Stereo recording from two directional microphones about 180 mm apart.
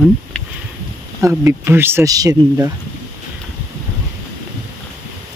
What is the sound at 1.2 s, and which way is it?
Speech, 15° right (ahead or behind).